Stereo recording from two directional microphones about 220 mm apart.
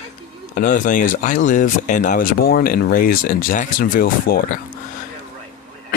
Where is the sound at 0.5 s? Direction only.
35° left (ahead or behind).